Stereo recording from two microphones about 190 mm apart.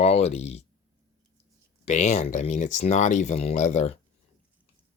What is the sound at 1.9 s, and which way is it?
Speech, 35° left (ahead or behind).